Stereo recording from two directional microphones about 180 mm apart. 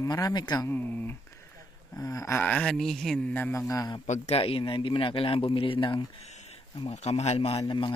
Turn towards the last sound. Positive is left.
turn(degrees=25)  # may be behind; listen again after turning